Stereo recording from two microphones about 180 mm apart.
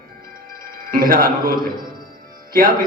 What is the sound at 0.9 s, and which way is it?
A man's voice, 55° right (ahead or behind).